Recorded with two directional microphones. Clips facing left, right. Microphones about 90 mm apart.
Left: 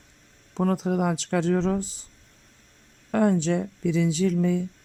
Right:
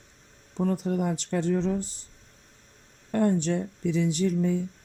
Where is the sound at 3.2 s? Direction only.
90° left.